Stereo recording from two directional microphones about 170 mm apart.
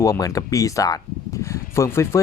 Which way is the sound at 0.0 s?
20° left (ahead or behind).